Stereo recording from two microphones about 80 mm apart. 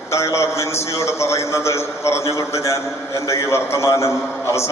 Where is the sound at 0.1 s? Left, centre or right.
Left.